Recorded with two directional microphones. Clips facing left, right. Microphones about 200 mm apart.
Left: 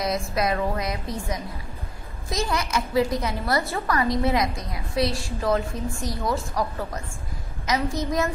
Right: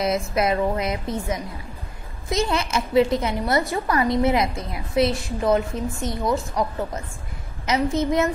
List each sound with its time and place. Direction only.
0.0 s a woman's voice: 25° right (ahead or behind)